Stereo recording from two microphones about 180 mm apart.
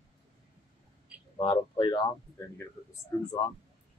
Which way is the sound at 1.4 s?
25° left (ahead or behind).